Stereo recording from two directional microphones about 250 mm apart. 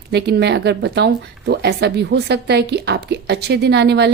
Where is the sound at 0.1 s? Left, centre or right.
Right.